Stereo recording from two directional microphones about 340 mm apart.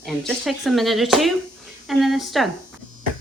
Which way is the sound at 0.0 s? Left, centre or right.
Centre.